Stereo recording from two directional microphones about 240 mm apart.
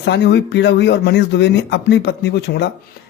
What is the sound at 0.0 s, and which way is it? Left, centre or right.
Speech, left.